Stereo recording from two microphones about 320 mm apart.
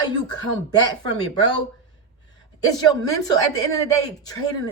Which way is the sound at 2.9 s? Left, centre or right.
Centre.